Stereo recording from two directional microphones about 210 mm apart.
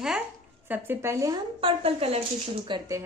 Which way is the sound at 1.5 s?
25° right (ahead or behind).